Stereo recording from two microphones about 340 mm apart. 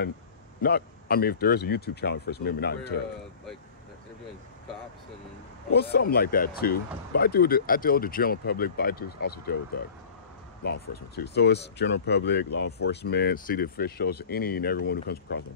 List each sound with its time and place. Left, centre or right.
0.6 s speech: left
5.7 s speech: left
11.1 s speech: left